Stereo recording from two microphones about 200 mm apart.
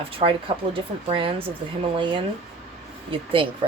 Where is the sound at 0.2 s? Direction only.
25° right (ahead or behind).